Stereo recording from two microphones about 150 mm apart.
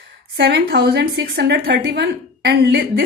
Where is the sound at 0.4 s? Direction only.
90° right.